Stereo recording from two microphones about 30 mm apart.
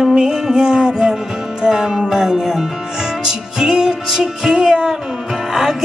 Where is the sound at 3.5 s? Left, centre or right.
Centre.